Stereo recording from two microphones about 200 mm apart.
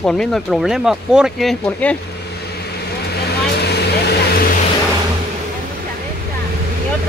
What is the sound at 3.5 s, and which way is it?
Vehicle, 55° left (ahead or behind).